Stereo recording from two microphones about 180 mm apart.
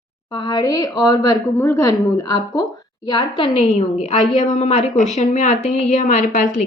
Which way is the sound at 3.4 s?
30° left (ahead or behind).